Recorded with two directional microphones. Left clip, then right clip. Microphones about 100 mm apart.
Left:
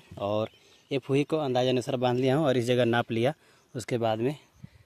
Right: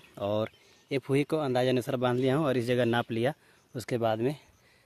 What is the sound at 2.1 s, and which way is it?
Speech, 20° left (ahead or behind).